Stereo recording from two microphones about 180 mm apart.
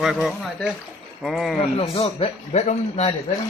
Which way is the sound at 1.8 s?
30° left (ahead or behind).